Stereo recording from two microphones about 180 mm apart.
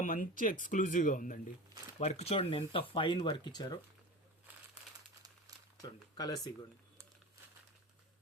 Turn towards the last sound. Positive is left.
turn(degrees=20)  # may be behind; listen again after turning